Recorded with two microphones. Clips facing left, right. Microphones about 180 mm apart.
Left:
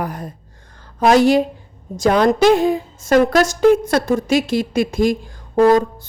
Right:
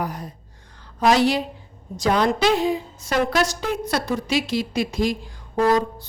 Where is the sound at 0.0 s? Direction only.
50° left (ahead or behind).